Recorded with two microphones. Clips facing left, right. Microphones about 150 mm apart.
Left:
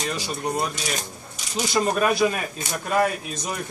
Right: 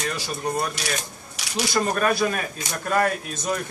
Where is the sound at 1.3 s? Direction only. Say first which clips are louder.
Right 1 dB; 75° right (ahead or behind).